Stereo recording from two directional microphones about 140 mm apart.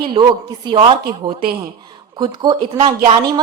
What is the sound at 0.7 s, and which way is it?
Speech, 40° right (ahead or behind).